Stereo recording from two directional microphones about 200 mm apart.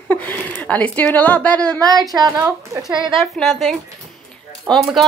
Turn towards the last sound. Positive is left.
turn(degrees=5)  # may be behind; listen again after turning